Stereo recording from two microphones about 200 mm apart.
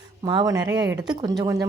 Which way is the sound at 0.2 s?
20° right (ahead or behind).